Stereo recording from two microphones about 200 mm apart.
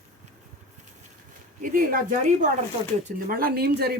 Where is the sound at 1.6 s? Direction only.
45° right (ahead or behind).